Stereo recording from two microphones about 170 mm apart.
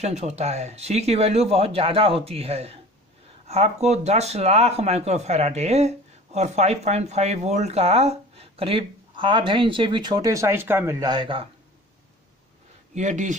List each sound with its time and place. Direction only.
0.0 s speech: 40° right (ahead or behind)
12.9 s speech: 45° right (ahead or behind)